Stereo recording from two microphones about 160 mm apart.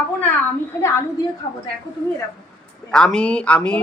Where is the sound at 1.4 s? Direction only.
35° left (ahead or behind).